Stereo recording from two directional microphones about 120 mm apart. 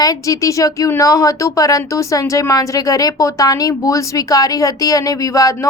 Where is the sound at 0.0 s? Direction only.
30° left (ahead or behind).